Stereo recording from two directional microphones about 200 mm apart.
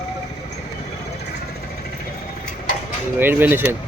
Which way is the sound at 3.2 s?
10° right (ahead or behind).